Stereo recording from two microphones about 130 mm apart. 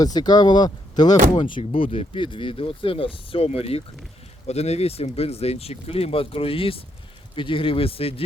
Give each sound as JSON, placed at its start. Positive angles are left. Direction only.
{"t": 0.0, "sound": "speech", "side_deg": 30}